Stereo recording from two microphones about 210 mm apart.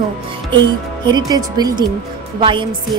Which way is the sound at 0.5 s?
20° right (ahead or behind).